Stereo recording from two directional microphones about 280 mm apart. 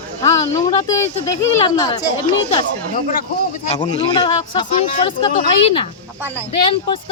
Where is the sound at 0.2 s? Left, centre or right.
Centre.